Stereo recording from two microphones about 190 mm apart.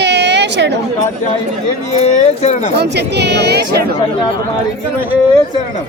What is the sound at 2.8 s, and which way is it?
Speech, 60° right (ahead or behind).